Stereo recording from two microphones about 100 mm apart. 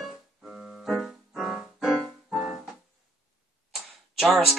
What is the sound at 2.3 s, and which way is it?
Music, 5° right (ahead or behind).